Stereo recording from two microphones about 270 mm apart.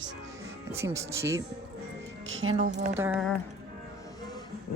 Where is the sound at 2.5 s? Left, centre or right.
Right.